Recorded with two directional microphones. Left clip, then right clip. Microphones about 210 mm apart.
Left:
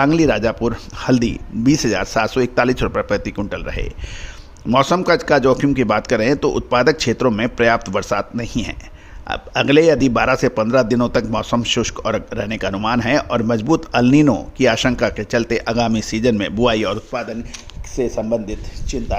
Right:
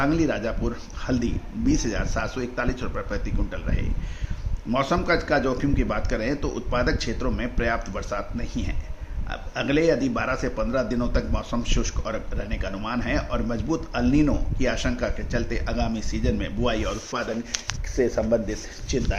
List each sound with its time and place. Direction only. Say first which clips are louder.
0.0 s a man's voice: left 9 dB; 55° left (ahead or behind)
17.1 s speech: left 4 dB; 35° left (ahead or behind)